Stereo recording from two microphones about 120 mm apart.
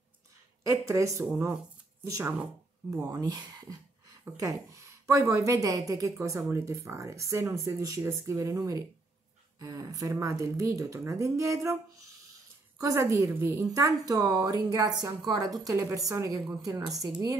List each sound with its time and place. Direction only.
0.7 s a woman's voice: 25° right (ahead or behind)
3.0 s a woman's voice: 30° right (ahead or behind)
12.7 s a woman's voice: 25° right (ahead or behind)